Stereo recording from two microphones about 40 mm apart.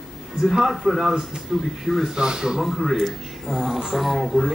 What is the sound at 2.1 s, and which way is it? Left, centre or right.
Speech, centre.